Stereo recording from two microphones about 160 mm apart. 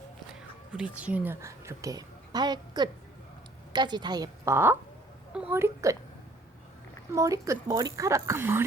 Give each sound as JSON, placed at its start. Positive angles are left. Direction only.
{"t": 0.7, "sound": "a woman's voice", "side_deg": -10}
{"t": 7.1, "sound": "speech", "side_deg": -20}